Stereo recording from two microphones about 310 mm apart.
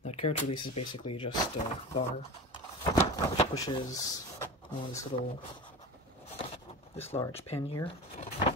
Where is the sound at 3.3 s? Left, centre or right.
Centre.